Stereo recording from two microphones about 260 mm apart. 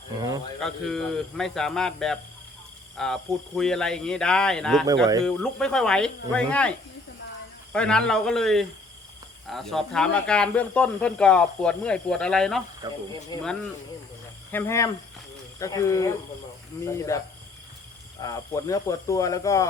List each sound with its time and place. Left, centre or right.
0.2 s a sound: centre
0.6 s speech: centre
12.8 s speech: centre
13.3 s speech: centre
14.5 s speech: centre